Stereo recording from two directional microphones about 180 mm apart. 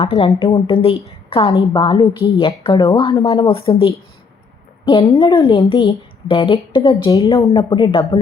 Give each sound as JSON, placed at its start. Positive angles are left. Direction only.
{"t": 0.0, "sound": "a woman's voice", "side_deg": 35}
{"t": 2.4, "sound": "a woman's voice", "side_deg": 30}
{"t": 4.9, "sound": "a woman's voice", "side_deg": 30}
{"t": 5.4, "sound": "a woman's voice", "side_deg": 20}
{"t": 5.6, "sound": "a woman's voice", "side_deg": 30}